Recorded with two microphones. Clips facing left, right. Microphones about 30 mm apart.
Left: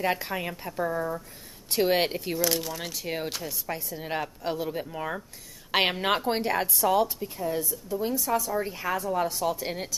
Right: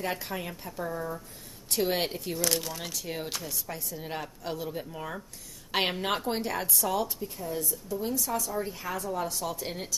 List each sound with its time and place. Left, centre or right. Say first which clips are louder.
0.0 s a woman's voice: left 5 dB; centre
2.3 s speech: left 3 dB; centre
2.9 s a woman's voice: left 3 dB; centre
3.3 s speech: left 2 dB; centre
3.6 s a woman's voice: left 4 dB; centre
8.2 s a woman's voice: left 4 dB; centre